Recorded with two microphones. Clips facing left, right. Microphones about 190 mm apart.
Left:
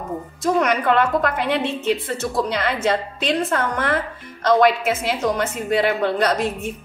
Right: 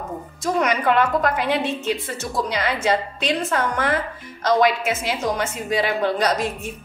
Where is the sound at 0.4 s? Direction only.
55° left (ahead or behind).